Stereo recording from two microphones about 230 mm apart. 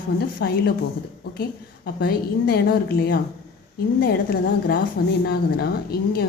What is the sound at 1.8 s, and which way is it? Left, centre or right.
A woman's voice, left.